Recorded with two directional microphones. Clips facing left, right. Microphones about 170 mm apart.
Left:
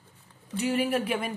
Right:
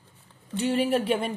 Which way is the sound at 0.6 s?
30° right (ahead or behind).